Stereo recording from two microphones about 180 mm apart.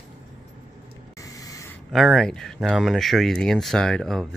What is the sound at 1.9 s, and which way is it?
Speech, centre (ahead or behind).